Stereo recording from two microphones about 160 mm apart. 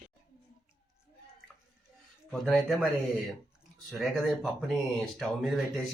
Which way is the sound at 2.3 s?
Centre (ahead or behind).